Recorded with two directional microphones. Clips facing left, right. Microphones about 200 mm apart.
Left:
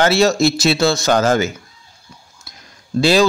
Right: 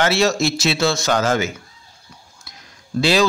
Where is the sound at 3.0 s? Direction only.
40° left (ahead or behind).